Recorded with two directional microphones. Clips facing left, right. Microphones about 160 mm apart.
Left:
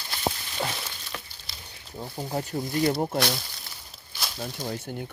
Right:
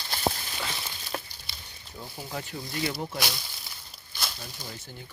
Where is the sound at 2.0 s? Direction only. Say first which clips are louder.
Left 6 dB; 35° left (ahead or behind).